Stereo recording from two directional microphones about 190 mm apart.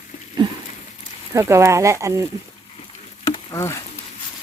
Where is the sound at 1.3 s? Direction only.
15° right (ahead or behind).